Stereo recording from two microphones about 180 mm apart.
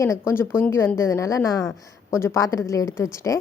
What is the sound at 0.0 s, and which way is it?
A woman's voice, 15° left (ahead or behind).